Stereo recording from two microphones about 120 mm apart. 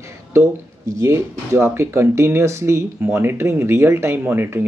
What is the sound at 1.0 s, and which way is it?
Speech, 25° right (ahead or behind).